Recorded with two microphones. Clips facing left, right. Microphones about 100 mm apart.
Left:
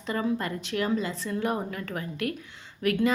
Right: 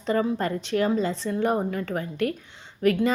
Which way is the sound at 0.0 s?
35° right (ahead or behind).